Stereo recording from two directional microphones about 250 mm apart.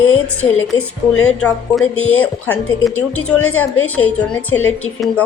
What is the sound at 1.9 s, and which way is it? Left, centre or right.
Speech, left.